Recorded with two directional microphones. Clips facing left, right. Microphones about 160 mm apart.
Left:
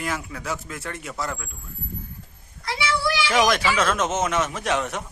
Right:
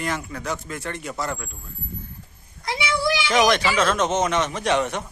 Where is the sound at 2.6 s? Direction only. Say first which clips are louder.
Right 1 dB; 15° right (ahead or behind).